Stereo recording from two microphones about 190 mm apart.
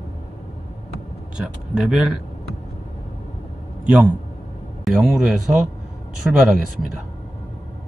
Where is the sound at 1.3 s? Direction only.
5° right (ahead or behind).